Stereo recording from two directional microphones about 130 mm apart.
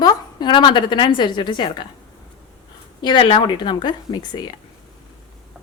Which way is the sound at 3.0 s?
35° left (ahead or behind).